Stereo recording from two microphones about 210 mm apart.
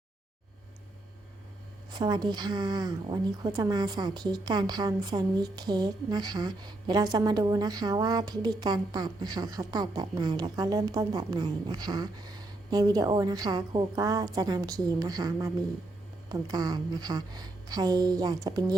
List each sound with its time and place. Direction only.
1.9 s a woman's voice: 20° right (ahead or behind)